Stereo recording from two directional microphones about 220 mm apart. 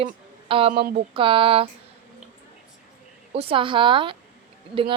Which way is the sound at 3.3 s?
25° right (ahead or behind).